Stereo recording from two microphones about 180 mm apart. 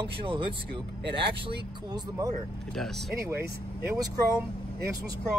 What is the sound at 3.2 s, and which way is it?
Speech, 15° right (ahead or behind).